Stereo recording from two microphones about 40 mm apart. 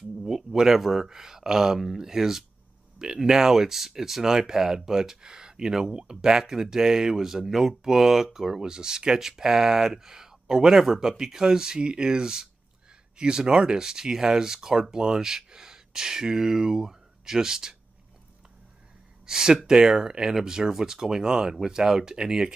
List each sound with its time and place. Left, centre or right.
0.2 s speech: centre
19.2 s speech: centre